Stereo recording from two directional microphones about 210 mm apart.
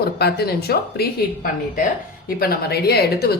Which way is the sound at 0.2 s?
50° left (ahead or behind).